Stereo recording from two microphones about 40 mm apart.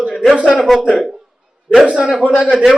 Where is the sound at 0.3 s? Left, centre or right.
Right.